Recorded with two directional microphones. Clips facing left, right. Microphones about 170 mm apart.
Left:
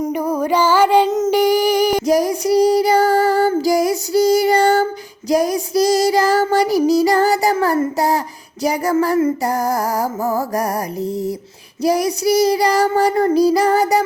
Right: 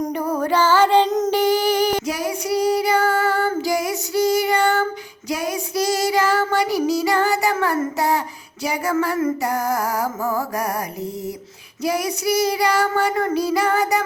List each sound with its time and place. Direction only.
0.0 s music: 10° left (ahead or behind)
2.0 s child singing: 40° left (ahead or behind)
11.8 s child singing: 35° left (ahead or behind)